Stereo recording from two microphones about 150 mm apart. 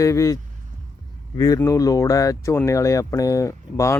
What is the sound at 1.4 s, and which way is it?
Speech, 20° left (ahead or behind).